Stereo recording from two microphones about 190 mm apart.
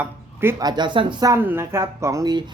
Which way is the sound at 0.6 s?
20° right (ahead or behind).